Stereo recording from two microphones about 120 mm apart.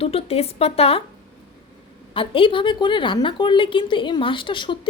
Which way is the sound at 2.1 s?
45° left (ahead or behind).